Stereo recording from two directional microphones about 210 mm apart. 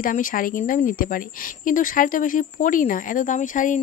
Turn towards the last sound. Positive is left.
turn(degrees=35)  # may be behind; listen again after turning